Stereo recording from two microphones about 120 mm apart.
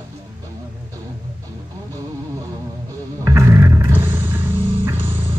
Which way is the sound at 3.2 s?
25° right (ahead or behind).